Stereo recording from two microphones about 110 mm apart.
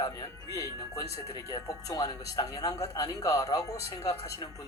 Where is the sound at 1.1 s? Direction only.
35° left (ahead or behind).